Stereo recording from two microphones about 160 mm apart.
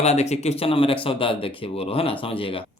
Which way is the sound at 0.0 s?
45° left (ahead or behind).